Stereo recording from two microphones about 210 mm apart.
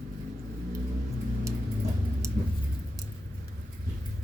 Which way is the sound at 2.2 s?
15° right (ahead or behind).